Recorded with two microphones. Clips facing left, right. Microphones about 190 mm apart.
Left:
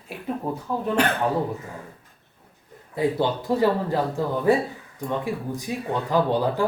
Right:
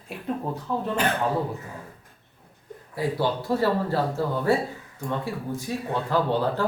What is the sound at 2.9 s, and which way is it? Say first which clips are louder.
Speech: left 3 dB; 20° left (ahead or behind).